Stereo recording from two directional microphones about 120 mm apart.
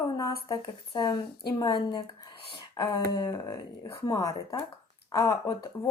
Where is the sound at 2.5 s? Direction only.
40° left (ahead or behind).